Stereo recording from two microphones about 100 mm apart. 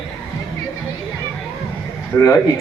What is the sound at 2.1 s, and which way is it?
Speech, 25° left (ahead or behind).